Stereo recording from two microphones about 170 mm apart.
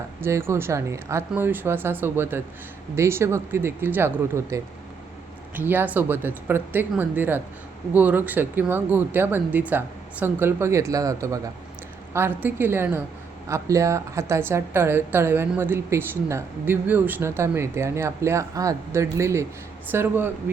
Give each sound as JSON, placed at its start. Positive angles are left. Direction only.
{"t": 0.2, "sound": "a woman's voice", "side_deg": -15}